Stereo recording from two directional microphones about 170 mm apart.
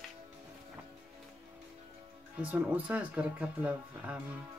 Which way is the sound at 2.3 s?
10° right (ahead or behind).